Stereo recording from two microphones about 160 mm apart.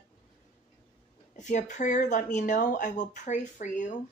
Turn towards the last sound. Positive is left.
turn(degrees=50)  # may be behind; listen again after turning